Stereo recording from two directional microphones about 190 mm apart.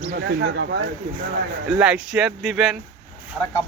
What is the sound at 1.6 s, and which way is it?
Speech, 5° right (ahead or behind).